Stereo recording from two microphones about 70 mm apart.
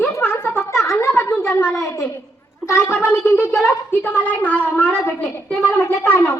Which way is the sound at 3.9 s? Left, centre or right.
Left.